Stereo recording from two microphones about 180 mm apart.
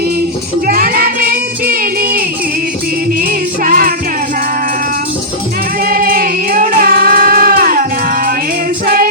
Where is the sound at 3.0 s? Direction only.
55° right (ahead or behind).